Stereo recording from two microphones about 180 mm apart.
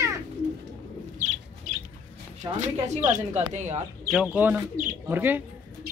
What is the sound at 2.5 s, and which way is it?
Speech, 40° right (ahead or behind).